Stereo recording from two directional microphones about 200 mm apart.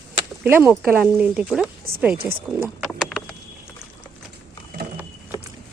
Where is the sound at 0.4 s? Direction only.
10° right (ahead or behind).